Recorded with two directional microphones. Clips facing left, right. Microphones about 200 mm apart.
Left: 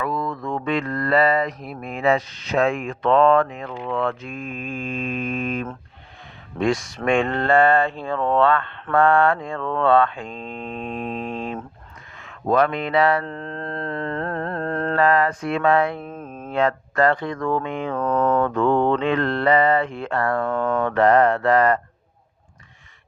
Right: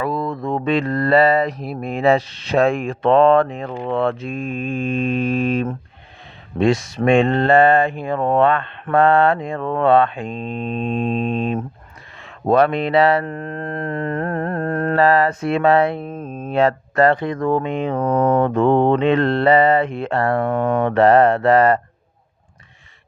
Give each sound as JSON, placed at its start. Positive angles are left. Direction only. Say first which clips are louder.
{"t": 0.0, "sound": "speech", "louder": "right 3 dB", "side_deg": -30}
{"t": 3.8, "sound": "speech", "louder": "right 4 dB", "side_deg": -55}
{"t": 4.0, "sound": "speech", "louder": "right 5 dB", "side_deg": -25}
{"t": 13.2, "sound": "a sound", "louder": "right 4 dB", "side_deg": -15}
{"t": 14.9, "sound": "speech", "louder": "right 3 dB", "side_deg": -30}